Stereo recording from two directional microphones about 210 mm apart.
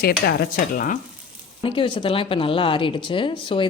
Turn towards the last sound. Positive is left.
turn(degrees=25)  # may be behind; listen again after turning